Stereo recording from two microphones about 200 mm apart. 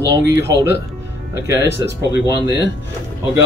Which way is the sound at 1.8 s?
15° right (ahead or behind).